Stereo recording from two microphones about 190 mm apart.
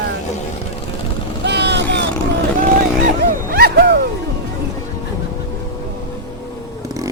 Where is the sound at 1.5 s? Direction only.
65° right (ahead or behind).